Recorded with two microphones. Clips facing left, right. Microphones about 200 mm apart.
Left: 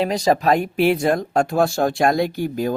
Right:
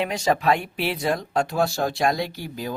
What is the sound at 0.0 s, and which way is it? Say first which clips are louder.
Speech: left 4 dB; 35° left (ahead or behind).